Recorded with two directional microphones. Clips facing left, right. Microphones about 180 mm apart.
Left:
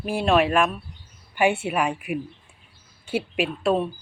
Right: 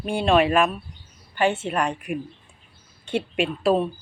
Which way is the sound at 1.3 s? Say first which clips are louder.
Left 1 dB; 10° left (ahead or behind).